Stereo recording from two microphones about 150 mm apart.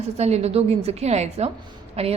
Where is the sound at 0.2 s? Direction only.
45° right (ahead or behind).